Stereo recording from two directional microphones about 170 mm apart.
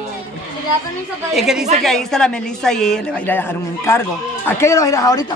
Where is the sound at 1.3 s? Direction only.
5° right (ahead or behind).